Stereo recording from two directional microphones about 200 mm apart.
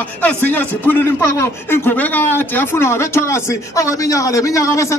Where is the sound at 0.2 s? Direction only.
5° left (ahead or behind).